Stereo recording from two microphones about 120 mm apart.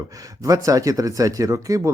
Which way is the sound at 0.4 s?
30° right (ahead or behind).